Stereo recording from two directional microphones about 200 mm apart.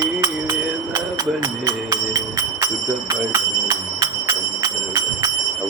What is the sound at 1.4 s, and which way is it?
Music, 15° right (ahead or behind).